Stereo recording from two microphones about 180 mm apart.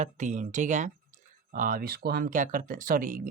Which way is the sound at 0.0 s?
40° right (ahead or behind).